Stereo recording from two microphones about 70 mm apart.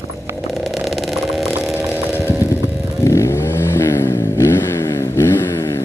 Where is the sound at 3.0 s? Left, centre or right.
Left.